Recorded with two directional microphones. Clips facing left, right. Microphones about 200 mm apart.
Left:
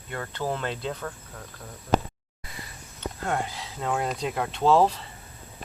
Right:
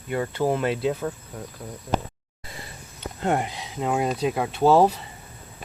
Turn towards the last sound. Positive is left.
turn(degrees=-10)  # may be behind; listen again after turning